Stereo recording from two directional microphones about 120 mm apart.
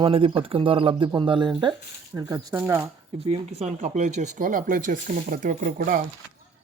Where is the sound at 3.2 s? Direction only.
65° right (ahead or behind); by 5.9 s 90° right.